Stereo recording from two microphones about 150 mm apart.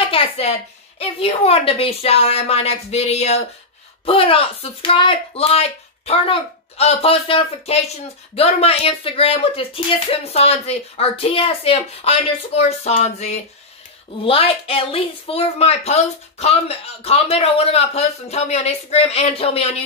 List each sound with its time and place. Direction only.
0.0 s a sound: 40° left (ahead or behind)
0.9 s a woman's voice: 40° left (ahead or behind)
14.2 s a woman's voice: 40° left (ahead or behind)